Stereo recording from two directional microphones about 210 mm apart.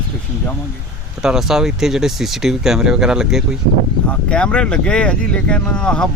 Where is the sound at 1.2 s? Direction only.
5° right (ahead or behind).